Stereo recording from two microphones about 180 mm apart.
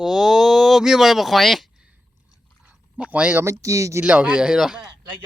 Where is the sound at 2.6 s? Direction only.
10° right (ahead or behind).